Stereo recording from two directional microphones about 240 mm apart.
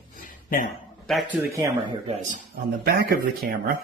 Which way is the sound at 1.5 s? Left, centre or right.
Centre.